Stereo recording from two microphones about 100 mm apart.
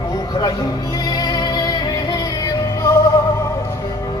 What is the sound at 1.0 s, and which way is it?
Music, 40° left (ahead or behind).